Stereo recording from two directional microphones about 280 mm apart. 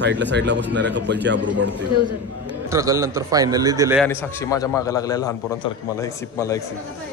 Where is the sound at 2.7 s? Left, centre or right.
Centre.